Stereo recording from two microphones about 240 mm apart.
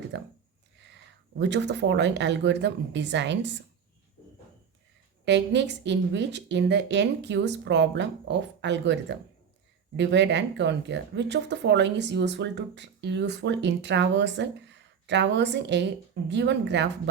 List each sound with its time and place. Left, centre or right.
0.1 s speech: right
1.4 s speech: right
5.2 s speech: right